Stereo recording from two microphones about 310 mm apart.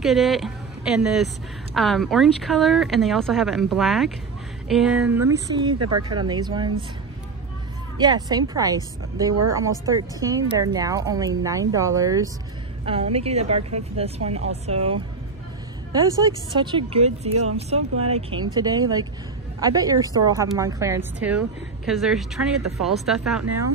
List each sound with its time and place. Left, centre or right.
0.0 s a woman's voice: centre
5.3 s a woman's voice: centre
5.8 s speech: right
6.0 s a woman's voice: centre
8.0 s a woman's voice: centre